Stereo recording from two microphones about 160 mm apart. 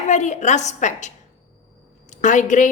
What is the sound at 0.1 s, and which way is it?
A woman's voice, 50° left (ahead or behind).